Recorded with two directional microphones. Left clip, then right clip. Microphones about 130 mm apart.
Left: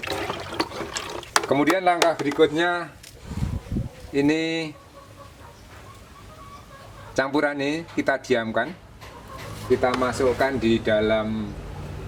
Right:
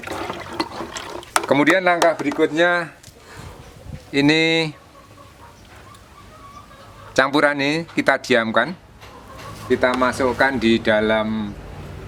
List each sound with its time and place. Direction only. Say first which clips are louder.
0.1 s water: right 3 dB; centre (ahead or behind)
1.5 s speech: right 5 dB; 45° right (ahead or behind)
4.1 s speech: right 6 dB; 55° right (ahead or behind)
7.2 s speech: right 6 dB; 55° right (ahead or behind)